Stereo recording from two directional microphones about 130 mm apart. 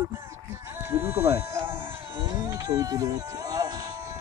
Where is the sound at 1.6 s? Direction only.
40° right (ahead or behind).